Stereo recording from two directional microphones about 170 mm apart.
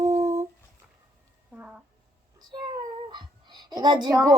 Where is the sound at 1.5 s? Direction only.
5° right (ahead or behind).